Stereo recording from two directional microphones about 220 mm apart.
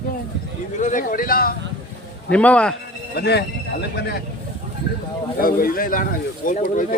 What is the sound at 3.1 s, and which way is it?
Speech, 50° left (ahead or behind).